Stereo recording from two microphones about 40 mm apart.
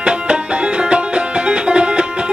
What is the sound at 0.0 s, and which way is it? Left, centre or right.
Music, right.